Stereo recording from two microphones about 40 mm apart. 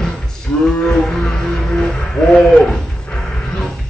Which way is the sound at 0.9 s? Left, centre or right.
Centre.